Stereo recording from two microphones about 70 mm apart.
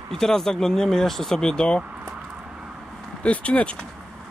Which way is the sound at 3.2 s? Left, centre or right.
Centre.